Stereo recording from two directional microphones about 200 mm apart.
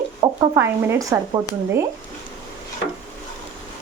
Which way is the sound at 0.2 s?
15° right (ahead or behind).